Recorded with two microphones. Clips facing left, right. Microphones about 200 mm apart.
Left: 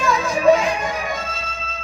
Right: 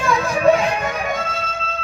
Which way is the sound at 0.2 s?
60° right (ahead or behind).